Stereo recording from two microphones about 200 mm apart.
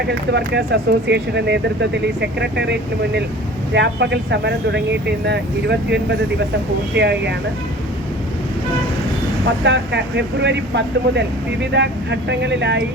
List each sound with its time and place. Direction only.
0.1 s speech: 60° right (ahead or behind)
9.6 s speech: 60° right (ahead or behind)